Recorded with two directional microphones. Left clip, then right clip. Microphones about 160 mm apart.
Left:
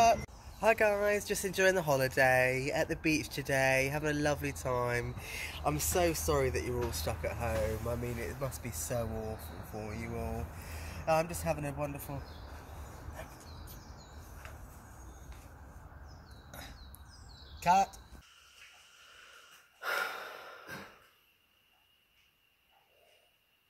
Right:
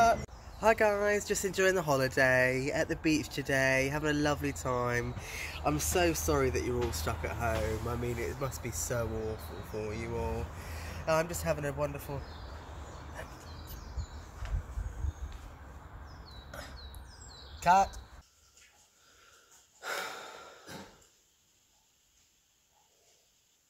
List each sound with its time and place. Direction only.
0.6 s speech: 10° right (ahead or behind)
14.4 s a sound: 60° left (ahead or behind)
17.6 s speech: 5° right (ahead or behind)
19.8 s breathing: 15° right (ahead or behind)